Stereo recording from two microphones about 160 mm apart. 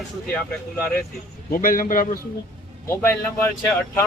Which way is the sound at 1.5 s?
60° left (ahead or behind).